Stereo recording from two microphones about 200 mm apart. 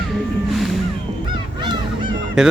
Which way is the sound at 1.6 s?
25° right (ahead or behind).